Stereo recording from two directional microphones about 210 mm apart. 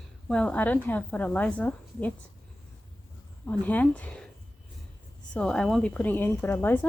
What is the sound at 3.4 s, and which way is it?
Speech, 10° left (ahead or behind).